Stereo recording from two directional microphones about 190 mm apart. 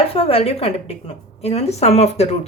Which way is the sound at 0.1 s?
30° left (ahead or behind).